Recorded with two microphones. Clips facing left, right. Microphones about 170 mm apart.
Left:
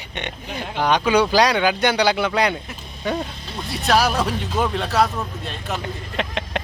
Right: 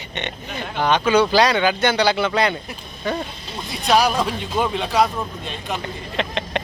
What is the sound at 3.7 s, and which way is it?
Speech, 5° left (ahead or behind).